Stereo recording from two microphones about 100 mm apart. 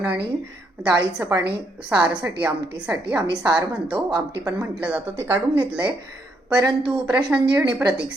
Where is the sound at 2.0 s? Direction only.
10° right (ahead or behind).